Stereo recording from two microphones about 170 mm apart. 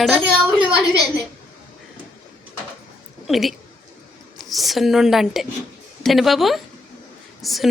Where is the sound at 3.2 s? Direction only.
Centre (ahead or behind).